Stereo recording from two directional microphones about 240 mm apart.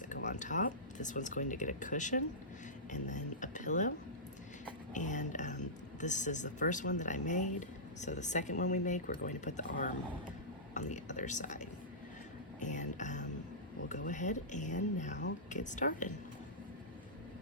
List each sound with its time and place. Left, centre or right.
0.1 s speech: left
4.9 s speech: left
12.5 s music: left
13.8 s speech: left